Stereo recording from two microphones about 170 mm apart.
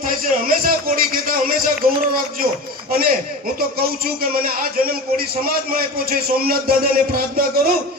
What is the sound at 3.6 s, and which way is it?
A man's voice, 60° right (ahead or behind).